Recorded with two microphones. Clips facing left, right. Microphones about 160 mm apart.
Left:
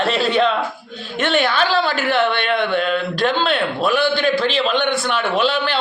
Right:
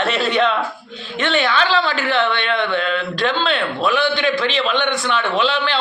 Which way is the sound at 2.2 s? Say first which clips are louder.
Left 1 dB; 45° left (ahead or behind).